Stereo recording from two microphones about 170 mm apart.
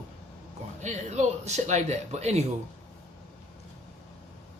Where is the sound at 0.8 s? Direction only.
45° right (ahead or behind).